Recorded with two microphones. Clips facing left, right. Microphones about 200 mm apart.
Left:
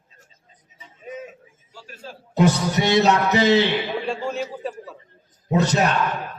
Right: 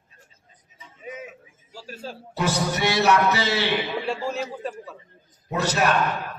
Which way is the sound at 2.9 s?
20° left (ahead or behind).